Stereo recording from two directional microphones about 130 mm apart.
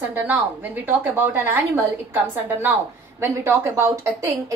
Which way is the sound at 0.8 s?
15° right (ahead or behind).